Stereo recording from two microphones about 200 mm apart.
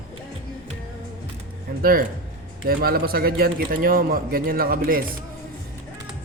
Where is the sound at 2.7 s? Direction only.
50° right (ahead or behind).